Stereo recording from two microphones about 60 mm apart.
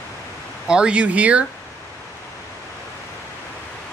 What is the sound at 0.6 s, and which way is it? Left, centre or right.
Speech, centre.